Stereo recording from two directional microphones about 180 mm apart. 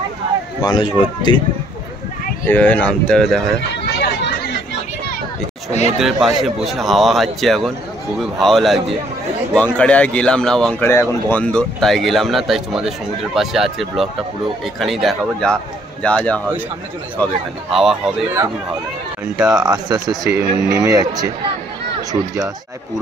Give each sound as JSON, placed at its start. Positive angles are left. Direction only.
{"t": 0.6, "sound": "speech", "side_deg": 25}
{"t": 2.4, "sound": "speech", "side_deg": 10}
{"t": 5.7, "sound": "speech", "side_deg": 40}
{"t": 5.9, "sound": "speech", "side_deg": 0}
{"t": 19.3, "sound": "speech", "side_deg": -5}
{"t": 19.6, "sound": "speech", "side_deg": -25}